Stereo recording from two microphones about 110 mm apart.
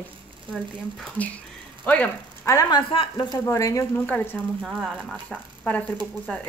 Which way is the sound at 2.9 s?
55° left (ahead or behind).